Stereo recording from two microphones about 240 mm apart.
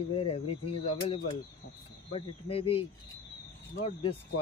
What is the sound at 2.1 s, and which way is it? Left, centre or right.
Speech, left.